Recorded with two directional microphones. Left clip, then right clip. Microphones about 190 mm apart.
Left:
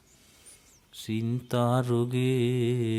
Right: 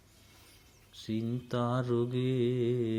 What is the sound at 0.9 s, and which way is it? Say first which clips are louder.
Music: left 3 dB; 40° left (ahead or behind).